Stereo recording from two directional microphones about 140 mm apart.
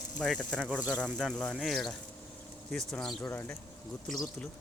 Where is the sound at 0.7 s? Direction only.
10° right (ahead or behind).